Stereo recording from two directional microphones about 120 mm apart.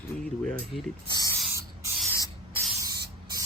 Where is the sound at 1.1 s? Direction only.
30° left (ahead or behind).